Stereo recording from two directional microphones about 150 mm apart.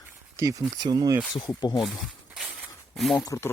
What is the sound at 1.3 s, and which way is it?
Speech, 30° left (ahead or behind).